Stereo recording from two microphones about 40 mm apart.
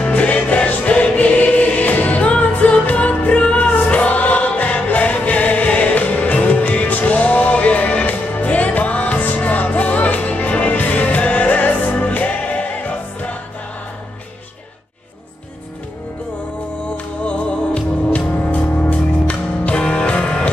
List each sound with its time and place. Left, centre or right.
0.0 s music: left
3.5 s choir: left
5.7 s music: left
16.9 s music: left